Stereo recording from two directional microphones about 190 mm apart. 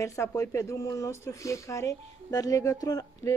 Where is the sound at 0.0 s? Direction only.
15° left (ahead or behind).